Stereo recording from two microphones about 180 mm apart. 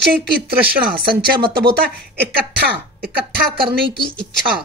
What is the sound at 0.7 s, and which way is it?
Speech, 55° right (ahead or behind).